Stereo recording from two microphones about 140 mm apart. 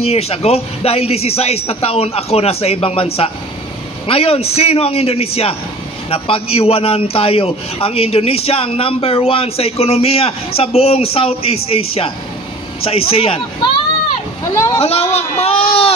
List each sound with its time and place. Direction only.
0.1 s a man's voice: 45° left (ahead or behind)
4.1 s a man's voice: 45° left (ahead or behind)
14.4 s speech: 25° left (ahead or behind)
14.8 s a man's voice: 50° left (ahead or behind)